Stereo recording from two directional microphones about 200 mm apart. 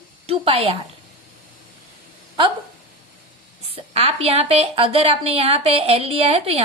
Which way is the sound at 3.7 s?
30° right (ahead or behind).